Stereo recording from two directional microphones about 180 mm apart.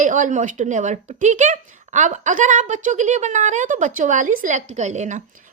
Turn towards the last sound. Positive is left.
turn(degrees=-40)  # may be behind; listen again after turning